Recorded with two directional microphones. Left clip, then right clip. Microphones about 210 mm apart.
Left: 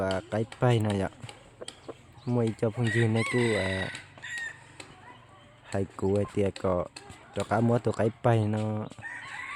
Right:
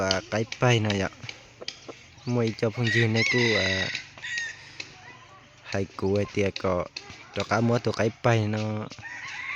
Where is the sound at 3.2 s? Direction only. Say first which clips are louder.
Right 4 dB; 40° left (ahead or behind).